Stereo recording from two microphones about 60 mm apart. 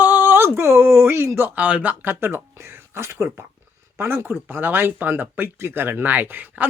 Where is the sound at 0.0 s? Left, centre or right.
Right.